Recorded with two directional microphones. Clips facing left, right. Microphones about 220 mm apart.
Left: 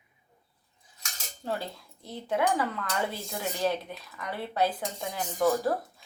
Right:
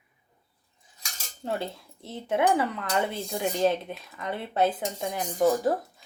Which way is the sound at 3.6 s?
30° right (ahead or behind).